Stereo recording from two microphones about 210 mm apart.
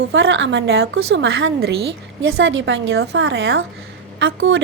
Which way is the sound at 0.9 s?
70° right (ahead or behind).